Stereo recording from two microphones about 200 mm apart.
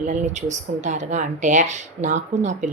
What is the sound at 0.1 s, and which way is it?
Speech, 35° right (ahead or behind).